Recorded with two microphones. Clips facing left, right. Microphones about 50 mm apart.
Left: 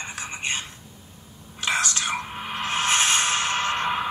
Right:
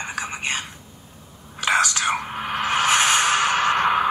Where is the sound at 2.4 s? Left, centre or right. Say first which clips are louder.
Right 5 dB; right.